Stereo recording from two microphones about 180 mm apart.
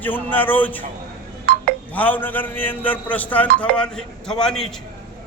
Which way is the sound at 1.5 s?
50° right (ahead or behind).